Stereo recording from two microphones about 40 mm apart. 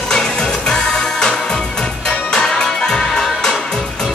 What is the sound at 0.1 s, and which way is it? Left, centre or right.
Music, centre.